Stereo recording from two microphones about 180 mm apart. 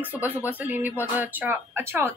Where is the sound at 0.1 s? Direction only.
5° right (ahead or behind).